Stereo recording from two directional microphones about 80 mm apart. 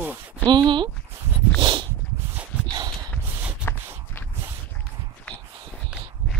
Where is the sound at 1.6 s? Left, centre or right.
Right.